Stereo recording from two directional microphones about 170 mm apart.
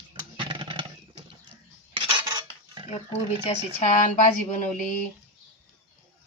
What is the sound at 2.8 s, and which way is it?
Speech, 40° left (ahead or behind).